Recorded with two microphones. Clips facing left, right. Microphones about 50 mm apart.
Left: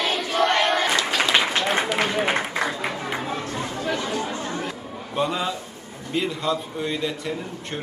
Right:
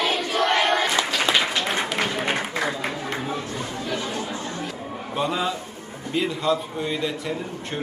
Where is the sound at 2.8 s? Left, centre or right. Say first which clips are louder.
Left 1 dB; centre.